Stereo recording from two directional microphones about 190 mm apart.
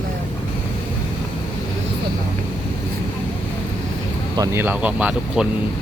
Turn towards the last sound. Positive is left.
turn(degrees=-5)  # may be behind; listen again after turning